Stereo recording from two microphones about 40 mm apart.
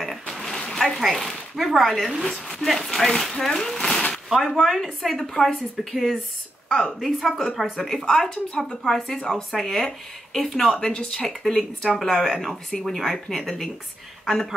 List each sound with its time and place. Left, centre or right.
0.0 s a sound: centre
0.4 s a sound: centre
1.1 s speech: centre
4.1 s a sound: centre
4.6 s speech: centre
5.1 s speech: centre
5.5 s speech: centre
10.8 s speech: centre
11.2 s speech: centre